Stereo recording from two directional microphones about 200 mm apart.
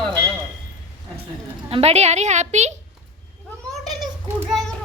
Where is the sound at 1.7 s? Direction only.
30° right (ahead or behind).